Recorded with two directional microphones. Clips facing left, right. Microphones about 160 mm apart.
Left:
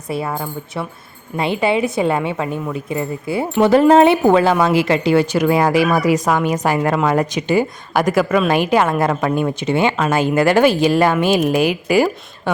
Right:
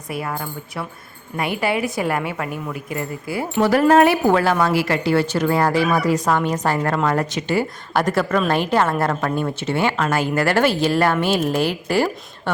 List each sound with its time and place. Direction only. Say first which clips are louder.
0.1 s a woman's voice: left 4 dB; 25° left (ahead or behind)